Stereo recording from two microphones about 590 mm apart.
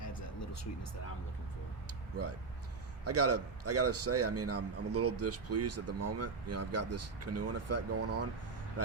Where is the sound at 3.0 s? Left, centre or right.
Right.